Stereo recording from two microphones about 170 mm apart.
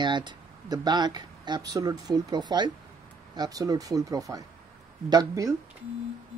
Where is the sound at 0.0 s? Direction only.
25° right (ahead or behind).